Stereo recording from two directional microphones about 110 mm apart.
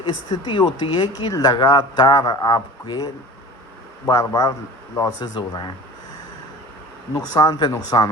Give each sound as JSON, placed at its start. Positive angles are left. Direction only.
{"t": 0.0, "sound": "speech", "side_deg": 45}
{"t": 7.1, "sound": "speech", "side_deg": 35}